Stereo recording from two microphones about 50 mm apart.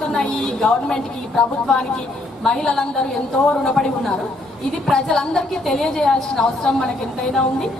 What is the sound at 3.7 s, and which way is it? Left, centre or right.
A woman's voice, centre.